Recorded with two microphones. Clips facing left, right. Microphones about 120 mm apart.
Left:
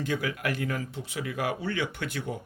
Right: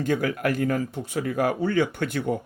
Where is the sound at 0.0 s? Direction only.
50° right (ahead or behind).